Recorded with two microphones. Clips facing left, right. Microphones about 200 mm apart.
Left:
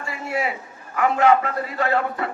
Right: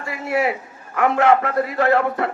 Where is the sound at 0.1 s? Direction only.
65° right (ahead or behind).